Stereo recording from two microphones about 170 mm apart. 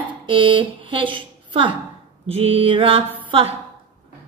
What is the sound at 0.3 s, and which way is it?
Speech, 30° right (ahead or behind).